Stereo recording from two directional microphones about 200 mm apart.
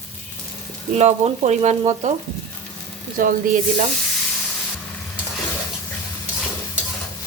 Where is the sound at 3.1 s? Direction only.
45° right (ahead or behind).